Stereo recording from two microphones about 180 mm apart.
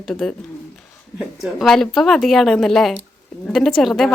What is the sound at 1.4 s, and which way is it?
A woman's voice, centre (ahead or behind).